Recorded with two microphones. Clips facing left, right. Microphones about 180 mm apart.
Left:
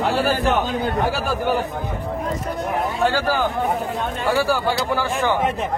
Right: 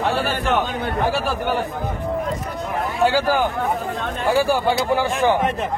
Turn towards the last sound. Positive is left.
turn(degrees=-15)  # may be behind; listen again after turning